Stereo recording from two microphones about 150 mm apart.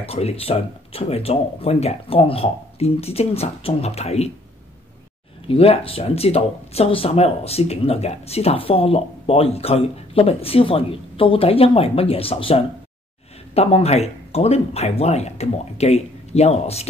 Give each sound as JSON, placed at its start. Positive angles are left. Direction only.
{"t": 0.0, "sound": "speech", "side_deg": 40}
{"t": 5.5, "sound": "speech", "side_deg": 40}